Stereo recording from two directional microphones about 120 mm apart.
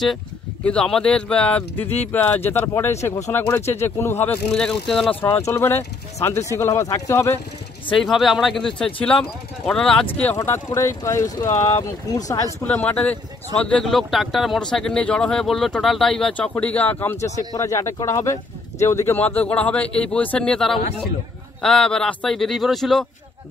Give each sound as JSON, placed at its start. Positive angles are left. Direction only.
{"t": 0.7, "sound": "speech", "side_deg": 5}
{"t": 4.5, "sound": "speech", "side_deg": 5}
{"t": 5.2, "sound": "speech", "side_deg": 20}
{"t": 7.9, "sound": "speech", "side_deg": 0}
{"t": 10.4, "sound": "speech", "side_deg": 20}
{"t": 12.6, "sound": "speech", "side_deg": 10}